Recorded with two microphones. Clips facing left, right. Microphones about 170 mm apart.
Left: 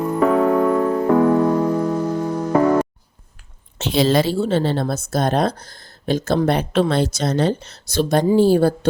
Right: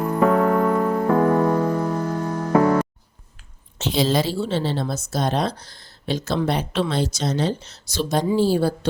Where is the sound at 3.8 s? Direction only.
65° left (ahead or behind).